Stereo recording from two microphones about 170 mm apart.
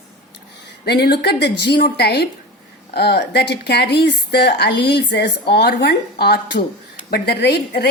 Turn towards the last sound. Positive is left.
turn(degrees=75)  # may be behind; listen again after turning